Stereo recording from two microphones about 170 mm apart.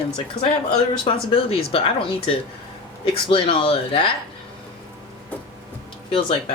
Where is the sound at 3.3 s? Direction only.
30° left (ahead or behind).